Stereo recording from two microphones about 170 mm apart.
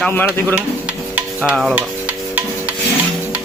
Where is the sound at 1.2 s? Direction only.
5° right (ahead or behind).